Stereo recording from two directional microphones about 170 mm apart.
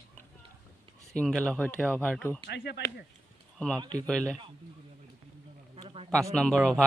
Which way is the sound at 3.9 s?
5° left (ahead or behind).